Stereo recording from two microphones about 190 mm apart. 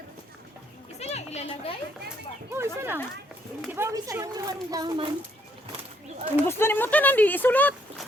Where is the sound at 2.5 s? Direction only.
15° right (ahead or behind).